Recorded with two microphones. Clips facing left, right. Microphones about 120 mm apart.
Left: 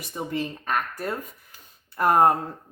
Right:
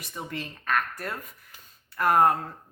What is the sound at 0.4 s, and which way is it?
Speech, 40° left (ahead or behind).